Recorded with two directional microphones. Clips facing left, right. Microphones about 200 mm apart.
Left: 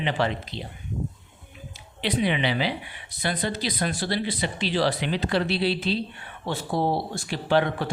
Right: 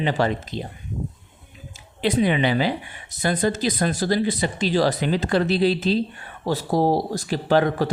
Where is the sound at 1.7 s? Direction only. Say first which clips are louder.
Right 6 dB; 45° right (ahead or behind).